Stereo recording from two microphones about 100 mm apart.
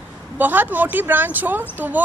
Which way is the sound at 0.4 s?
20° right (ahead or behind).